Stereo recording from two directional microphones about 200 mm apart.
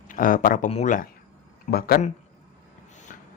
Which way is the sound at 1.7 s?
50° left (ahead or behind).